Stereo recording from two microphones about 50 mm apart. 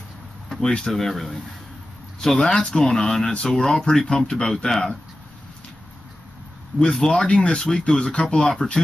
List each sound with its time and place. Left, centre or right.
0.5 s speech: centre
6.9 s speech: centre